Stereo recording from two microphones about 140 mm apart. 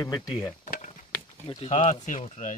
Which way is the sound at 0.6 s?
60° left (ahead or behind).